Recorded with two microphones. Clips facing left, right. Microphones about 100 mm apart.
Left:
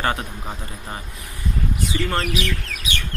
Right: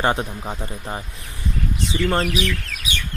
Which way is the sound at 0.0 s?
25° right (ahead or behind).